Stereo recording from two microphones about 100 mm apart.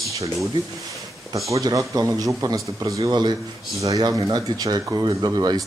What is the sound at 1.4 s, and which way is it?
Speech, 35° right (ahead or behind).